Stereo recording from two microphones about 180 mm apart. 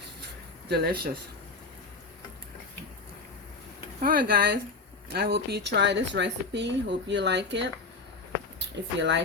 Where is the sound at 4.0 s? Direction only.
55° right (ahead or behind); by 7.7 s 75° right (ahead or behind).